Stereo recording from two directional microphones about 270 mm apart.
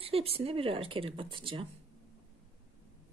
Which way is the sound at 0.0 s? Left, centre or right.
Right.